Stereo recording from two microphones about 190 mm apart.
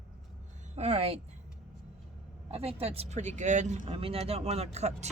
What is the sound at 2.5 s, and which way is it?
Speech, 30° right (ahead or behind).